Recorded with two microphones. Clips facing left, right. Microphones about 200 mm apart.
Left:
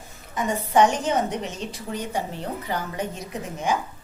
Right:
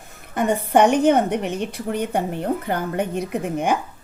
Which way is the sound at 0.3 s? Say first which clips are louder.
Right 3 dB; 60° right (ahead or behind).